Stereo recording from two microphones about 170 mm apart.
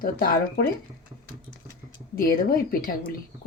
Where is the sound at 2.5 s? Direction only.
60° left (ahead or behind).